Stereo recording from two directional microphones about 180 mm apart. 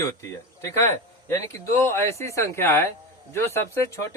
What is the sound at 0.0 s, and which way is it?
A man's voice, 15° left (ahead or behind).